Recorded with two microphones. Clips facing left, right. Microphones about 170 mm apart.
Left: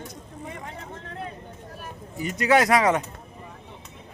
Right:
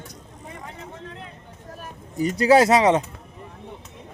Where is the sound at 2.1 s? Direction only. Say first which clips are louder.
Right 5 dB; 35° right (ahead or behind).